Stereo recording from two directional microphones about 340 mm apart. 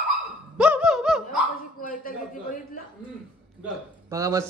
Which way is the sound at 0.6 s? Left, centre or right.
Centre.